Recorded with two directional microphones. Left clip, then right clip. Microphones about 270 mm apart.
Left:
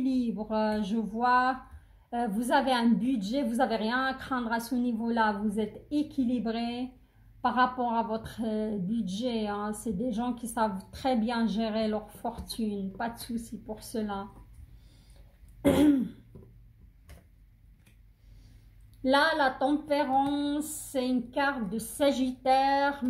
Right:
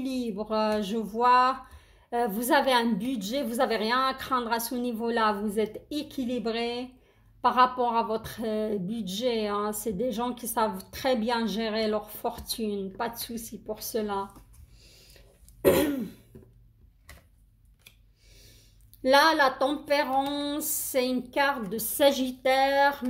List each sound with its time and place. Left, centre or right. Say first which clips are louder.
0.0 s a woman's voice: left 1 dB; right
19.0 s a woman's voice: right 4 dB; right